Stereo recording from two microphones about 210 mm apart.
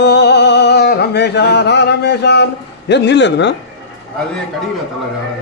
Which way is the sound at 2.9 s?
55° left (ahead or behind).